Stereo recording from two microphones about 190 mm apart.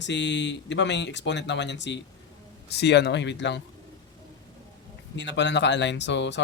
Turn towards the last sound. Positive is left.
turn(degrees=70)  # may be behind; listen again after turning